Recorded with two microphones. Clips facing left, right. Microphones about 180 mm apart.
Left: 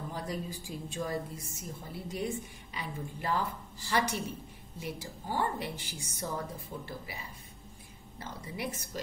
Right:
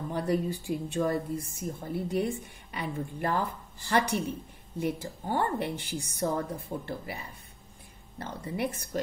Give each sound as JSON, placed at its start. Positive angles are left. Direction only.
{"t": 0.1, "sound": "a woman's voice", "side_deg": -65}